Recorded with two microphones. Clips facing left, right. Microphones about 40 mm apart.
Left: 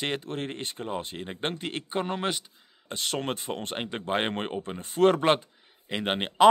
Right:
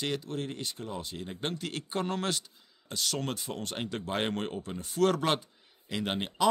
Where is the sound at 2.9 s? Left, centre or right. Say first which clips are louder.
Left 3 dB; left.